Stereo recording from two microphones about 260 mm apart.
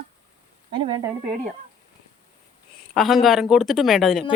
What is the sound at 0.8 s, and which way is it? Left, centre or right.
Speech, centre.